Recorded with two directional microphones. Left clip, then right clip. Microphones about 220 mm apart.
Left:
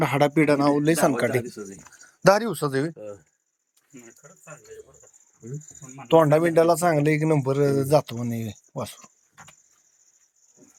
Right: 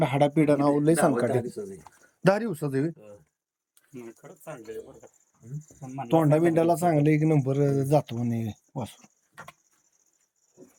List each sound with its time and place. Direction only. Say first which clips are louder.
0.0 s speech: left 2 dB; 5° right (ahead or behind)
1.6 s speech: right 2 dB; 45° left (ahead or behind)
2.0 s speech: left 6 dB; 5° right (ahead or behind)
6.1 s speech: left 5 dB; 5° right (ahead or behind)